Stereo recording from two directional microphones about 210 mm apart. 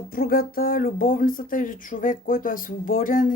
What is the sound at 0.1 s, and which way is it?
Speech, 45° left (ahead or behind).